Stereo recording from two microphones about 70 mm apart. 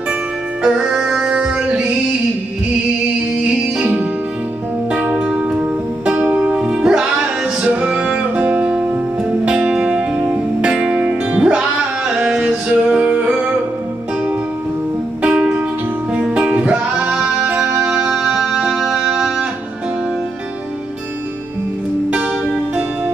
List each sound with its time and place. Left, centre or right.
0.6 s music: centre
3.3 s music: centre
7.6 s music: right
15.2 s music: centre
18.1 s music: centre